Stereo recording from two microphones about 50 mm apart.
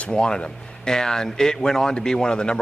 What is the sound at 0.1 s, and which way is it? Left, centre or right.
Speech, centre.